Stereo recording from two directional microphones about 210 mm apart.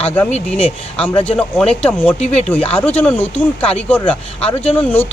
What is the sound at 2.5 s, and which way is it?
Speech, 5° left (ahead or behind).